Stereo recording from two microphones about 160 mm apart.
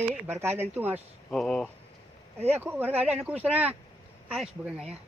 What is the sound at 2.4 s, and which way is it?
Speech, 15° right (ahead or behind).